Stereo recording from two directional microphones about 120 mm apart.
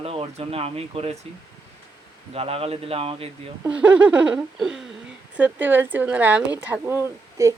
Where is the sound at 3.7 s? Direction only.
10° right (ahead or behind).